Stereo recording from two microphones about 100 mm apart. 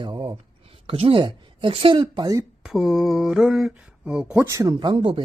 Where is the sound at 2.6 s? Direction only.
5° right (ahead or behind).